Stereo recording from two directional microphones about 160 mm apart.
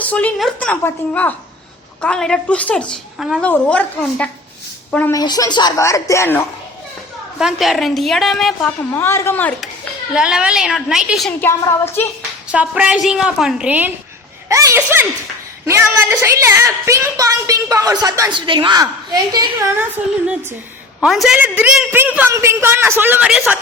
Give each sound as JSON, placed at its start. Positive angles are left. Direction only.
{"t": 0.0, "sound": "a woman's voice", "side_deg": 10}
{"t": 3.4, "sound": "a woman's voice", "side_deg": 10}
{"t": 5.1, "sound": "a woman's voice", "side_deg": 25}
{"t": 7.3, "sound": "a woman's voice", "side_deg": 0}
{"t": 8.8, "sound": "a woman's voice", "side_deg": 15}
{"t": 10.2, "sound": "a woman's voice", "side_deg": -5}
{"t": 11.3, "sound": "a woman's voice", "side_deg": 15}
{"t": 12.5, "sound": "a woman's voice", "side_deg": -10}
{"t": 20.2, "sound": "a man's voice", "side_deg": -5}